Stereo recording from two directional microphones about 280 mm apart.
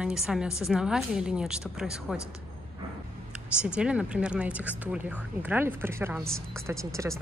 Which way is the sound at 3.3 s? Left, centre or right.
Centre.